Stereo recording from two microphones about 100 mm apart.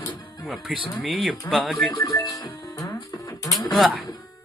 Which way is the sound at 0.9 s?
5° right (ahead or behind).